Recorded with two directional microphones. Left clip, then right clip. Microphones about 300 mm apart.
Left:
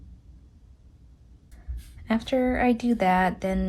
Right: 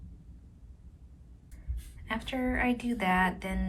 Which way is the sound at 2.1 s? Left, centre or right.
Centre.